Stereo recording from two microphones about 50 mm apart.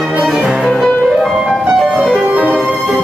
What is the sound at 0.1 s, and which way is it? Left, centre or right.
Music, right.